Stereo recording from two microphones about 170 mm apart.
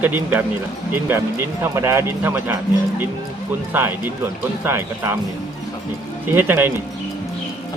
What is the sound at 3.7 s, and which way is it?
Speech, 10° right (ahead or behind).